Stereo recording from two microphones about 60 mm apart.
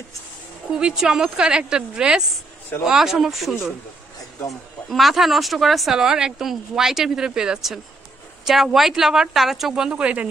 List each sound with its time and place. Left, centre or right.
0.7 s a woman's voice: centre
4.8 s speech: centre
9.8 s speech: centre